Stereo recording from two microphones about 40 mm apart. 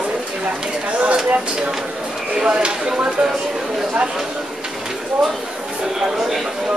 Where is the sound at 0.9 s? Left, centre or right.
Right.